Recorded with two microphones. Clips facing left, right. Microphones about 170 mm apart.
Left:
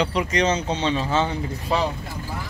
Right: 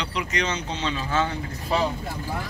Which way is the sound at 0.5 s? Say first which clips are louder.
Left 6 dB; 30° left (ahead or behind).